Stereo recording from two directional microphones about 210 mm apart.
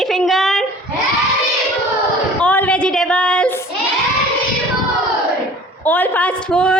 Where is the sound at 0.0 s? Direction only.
Centre (ahead or behind).